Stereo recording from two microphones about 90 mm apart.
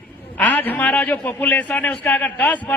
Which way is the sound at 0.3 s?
20° left (ahead or behind).